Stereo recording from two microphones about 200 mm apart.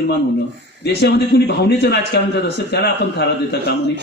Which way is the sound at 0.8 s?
55° left (ahead or behind).